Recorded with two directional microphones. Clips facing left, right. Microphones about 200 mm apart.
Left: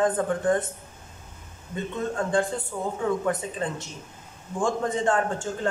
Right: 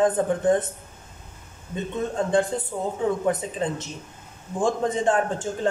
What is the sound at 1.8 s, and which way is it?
Speech, 20° right (ahead or behind).